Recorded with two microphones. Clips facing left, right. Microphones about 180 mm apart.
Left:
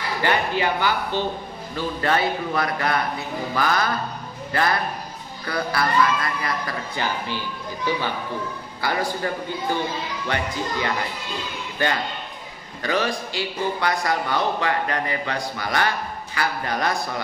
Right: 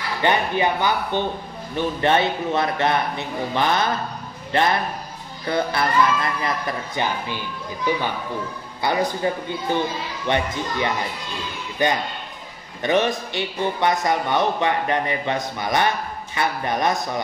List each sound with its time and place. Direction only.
0.2 s a man's voice: 20° right (ahead or behind)
8.8 s a man's voice: 20° right (ahead or behind)